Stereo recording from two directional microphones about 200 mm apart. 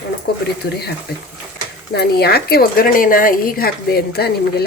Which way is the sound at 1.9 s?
55° left (ahead or behind).